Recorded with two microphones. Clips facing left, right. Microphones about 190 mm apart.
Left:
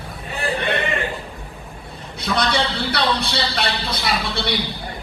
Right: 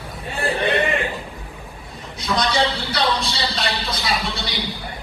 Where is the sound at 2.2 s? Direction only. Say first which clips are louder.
Right 1 dB; 60° left (ahead or behind).